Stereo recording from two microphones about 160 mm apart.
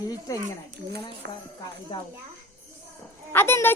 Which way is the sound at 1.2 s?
90° right.